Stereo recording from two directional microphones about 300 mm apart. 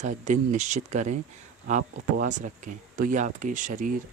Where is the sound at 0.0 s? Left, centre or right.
Right.